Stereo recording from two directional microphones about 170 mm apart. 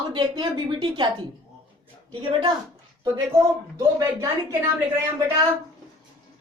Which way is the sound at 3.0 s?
20° right (ahead or behind).